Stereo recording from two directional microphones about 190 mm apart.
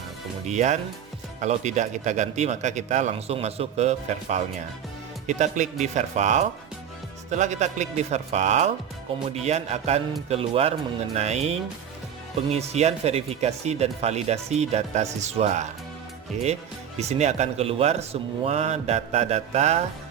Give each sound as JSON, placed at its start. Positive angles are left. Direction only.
{"t": 0.4, "sound": "speech", "side_deg": -40}